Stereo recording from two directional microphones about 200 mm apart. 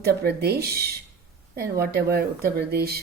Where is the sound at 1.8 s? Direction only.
50° right (ahead or behind).